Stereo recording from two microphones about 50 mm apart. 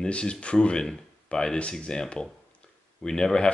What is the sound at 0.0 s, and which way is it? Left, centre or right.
Speech, centre.